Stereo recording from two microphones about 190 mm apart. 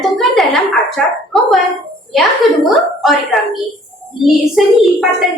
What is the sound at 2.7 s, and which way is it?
A woman's voice, centre (ahead or behind).